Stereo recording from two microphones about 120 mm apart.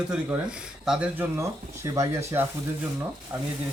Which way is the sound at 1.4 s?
20° right (ahead or behind).